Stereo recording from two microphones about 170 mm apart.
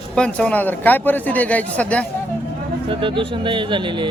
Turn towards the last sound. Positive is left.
turn(degrees=-30)  # may be behind; listen again after turning